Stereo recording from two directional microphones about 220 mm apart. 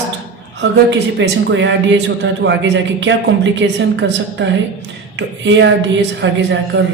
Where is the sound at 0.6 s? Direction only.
55° right (ahead or behind).